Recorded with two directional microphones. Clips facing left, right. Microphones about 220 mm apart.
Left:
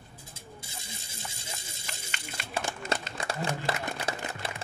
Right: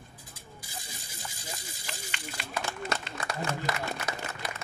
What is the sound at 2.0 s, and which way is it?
Run, 45° left (ahead or behind).